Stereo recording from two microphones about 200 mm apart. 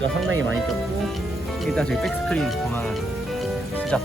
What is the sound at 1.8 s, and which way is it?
Speech, 5° left (ahead or behind).